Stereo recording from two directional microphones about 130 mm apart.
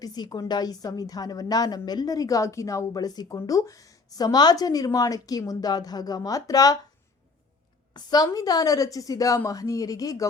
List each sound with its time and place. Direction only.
0.0 s a woman's voice: 30° left (ahead or behind)
7.9 s a woman's voice: 30° left (ahead or behind)